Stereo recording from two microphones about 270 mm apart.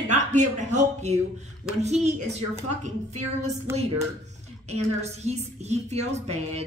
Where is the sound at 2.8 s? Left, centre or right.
Right.